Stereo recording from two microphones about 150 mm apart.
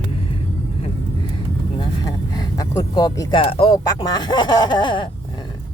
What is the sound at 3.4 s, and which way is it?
Speech, 40° left (ahead or behind).